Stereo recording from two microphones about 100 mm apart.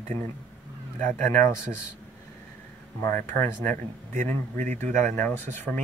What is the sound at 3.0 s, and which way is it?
Speech, 25° left (ahead or behind).